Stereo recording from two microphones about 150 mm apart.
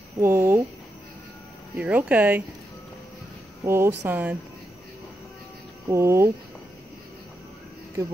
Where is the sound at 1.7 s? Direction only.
10° right (ahead or behind).